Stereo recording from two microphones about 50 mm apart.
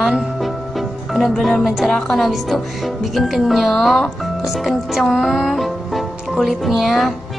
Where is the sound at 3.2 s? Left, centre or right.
Centre.